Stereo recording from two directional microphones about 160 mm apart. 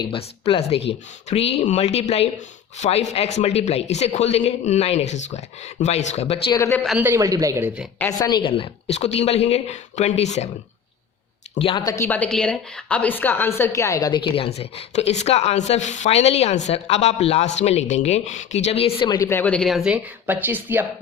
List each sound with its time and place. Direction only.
0.0 s a woman's voice: 35° left (ahead or behind)
7.0 s a man's voice: 20° right (ahead or behind)
8.2 s a woman's voice: 30° left (ahead or behind); by 10.5 s 45° left (ahead or behind)
11.5 s a woman's voice: 30° left (ahead or behind); by 20.8 s 10° right (ahead or behind)